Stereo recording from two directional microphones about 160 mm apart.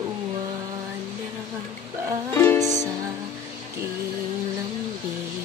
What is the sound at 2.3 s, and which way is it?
Music, 15° left (ahead or behind).